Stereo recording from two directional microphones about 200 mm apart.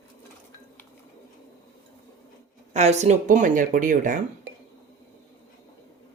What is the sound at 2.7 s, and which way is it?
Speech, 35° right (ahead or behind).